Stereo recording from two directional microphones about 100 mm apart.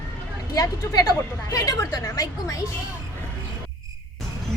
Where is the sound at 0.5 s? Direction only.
40° left (ahead or behind).